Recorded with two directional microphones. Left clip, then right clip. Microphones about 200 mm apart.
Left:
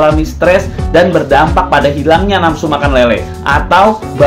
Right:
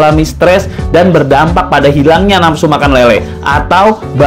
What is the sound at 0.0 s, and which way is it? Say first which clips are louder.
Speech: right 2 dB; 35° right (ahead or behind).